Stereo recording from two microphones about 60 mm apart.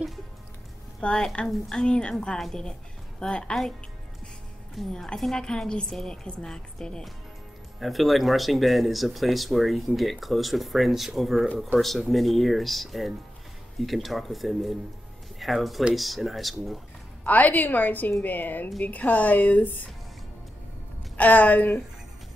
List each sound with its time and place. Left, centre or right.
1.0 s a woman's voice: centre
4.7 s a woman's voice: centre
7.8 s speech: centre
17.2 s a woman's voice: left
21.2 s a woman's voice: left